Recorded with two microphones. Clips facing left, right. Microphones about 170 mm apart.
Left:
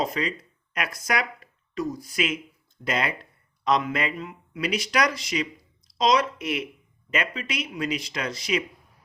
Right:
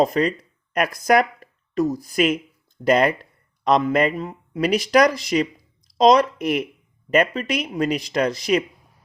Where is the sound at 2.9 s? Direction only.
50° right (ahead or behind).